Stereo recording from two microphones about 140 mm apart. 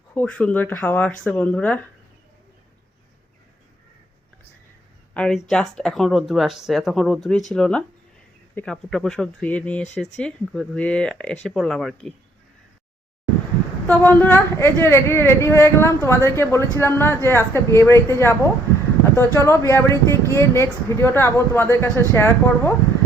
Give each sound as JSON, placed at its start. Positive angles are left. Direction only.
{"t": 0.1, "sound": "speech", "side_deg": 10}
{"t": 5.1, "sound": "speech", "side_deg": 5}
{"t": 13.8, "sound": "a woman's voice", "side_deg": 15}